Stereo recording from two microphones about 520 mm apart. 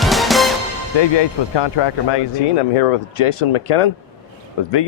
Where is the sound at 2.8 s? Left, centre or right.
Left.